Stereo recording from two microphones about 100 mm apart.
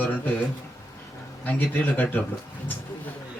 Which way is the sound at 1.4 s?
20° left (ahead or behind).